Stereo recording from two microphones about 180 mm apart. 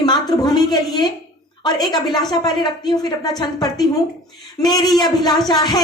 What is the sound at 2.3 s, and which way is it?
Speech, 25° left (ahead or behind).